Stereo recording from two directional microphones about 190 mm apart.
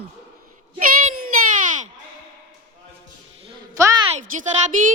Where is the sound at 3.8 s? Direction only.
15° right (ahead or behind).